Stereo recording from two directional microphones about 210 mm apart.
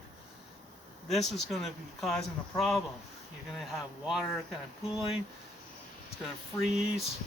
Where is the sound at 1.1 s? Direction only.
Centre (ahead or behind).